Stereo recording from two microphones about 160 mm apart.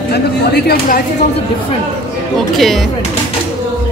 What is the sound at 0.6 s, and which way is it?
Speech, 70° left (ahead or behind).